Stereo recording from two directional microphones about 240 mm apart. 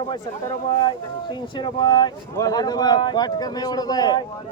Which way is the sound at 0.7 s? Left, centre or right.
Centre.